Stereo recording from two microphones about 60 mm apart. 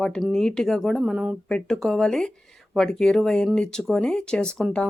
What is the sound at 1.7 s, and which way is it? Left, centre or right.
Speech, centre.